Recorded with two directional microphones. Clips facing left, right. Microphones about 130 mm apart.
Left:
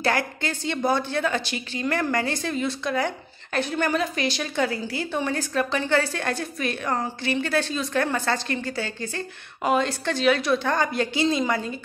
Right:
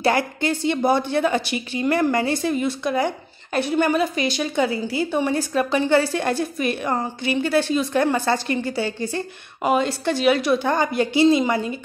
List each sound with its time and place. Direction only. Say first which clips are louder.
0.4 s a woman's voice: right 6 dB; 15° right (ahead or behind)